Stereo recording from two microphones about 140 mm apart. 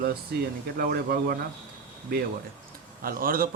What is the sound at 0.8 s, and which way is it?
Speech, 90° right.